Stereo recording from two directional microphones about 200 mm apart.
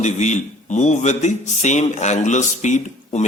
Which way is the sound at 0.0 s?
35° left (ahead or behind).